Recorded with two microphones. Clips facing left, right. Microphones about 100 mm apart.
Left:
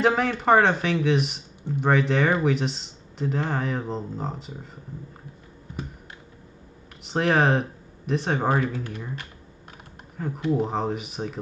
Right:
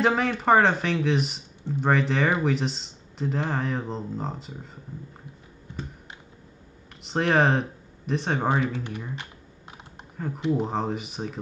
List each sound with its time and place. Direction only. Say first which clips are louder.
0.0 s speech: left 1 dB; centre (ahead or behind)
7.1 s speech: left 1 dB; centre (ahead or behind)
8.7 s speech: even; 15° right (ahead or behind)
10.1 s speech: left 1 dB; centre (ahead or behind)